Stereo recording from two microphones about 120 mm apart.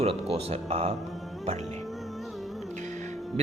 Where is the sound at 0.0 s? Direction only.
60° right (ahead or behind).